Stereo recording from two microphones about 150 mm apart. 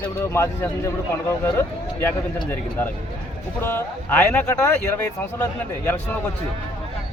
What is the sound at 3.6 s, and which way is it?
Speech, 15° left (ahead or behind).